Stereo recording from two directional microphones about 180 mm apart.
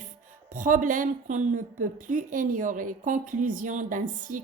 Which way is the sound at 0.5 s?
45° right (ahead or behind).